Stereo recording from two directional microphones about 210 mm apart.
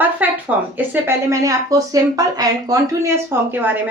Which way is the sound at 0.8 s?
10° right (ahead or behind).